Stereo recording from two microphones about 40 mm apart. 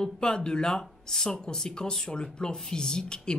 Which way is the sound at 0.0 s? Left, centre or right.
Centre.